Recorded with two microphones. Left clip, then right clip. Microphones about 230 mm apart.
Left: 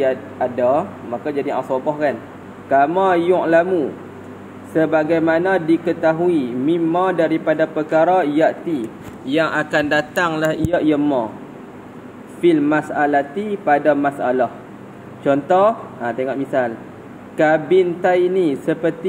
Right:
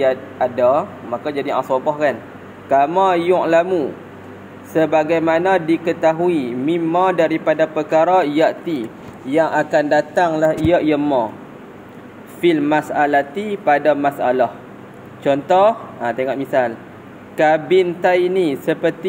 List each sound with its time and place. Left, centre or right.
0.0 s speech: right
9.3 s a man's voice: centre
10.7 s speech: centre
12.4 s speech: centre